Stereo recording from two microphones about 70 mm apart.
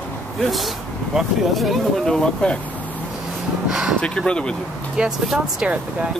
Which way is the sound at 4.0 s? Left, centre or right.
Centre.